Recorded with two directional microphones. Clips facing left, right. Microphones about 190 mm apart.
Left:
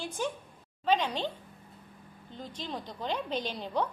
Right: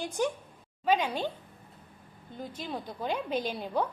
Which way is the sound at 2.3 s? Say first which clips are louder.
Right 2 dB; 10° right (ahead or behind).